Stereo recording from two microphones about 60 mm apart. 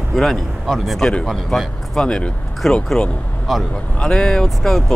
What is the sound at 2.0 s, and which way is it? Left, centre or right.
Speech, centre.